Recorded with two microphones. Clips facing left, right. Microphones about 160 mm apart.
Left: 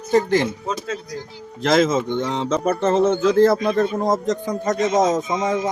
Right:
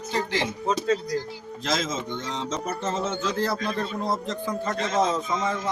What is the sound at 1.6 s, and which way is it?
Speech, 60° left (ahead or behind).